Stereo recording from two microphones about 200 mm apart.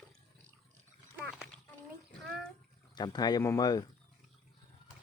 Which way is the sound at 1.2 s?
Centre (ahead or behind).